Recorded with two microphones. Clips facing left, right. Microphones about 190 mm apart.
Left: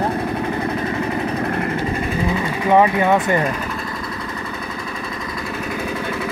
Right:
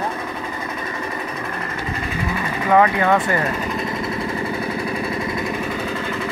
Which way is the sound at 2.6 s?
15° left (ahead or behind).